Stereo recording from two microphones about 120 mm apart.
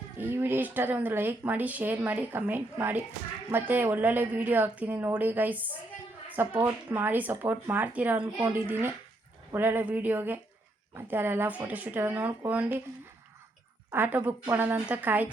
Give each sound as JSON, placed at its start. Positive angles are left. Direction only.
{"t": 0.2, "sound": "speech", "side_deg": -15}
{"t": 13.9, "sound": "speech", "side_deg": -15}